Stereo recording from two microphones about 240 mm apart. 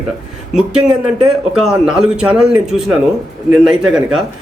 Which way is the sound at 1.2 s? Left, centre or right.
Centre.